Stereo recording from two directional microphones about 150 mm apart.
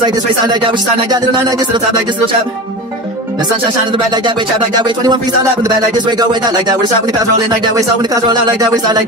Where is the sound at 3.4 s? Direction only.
30° right (ahead or behind).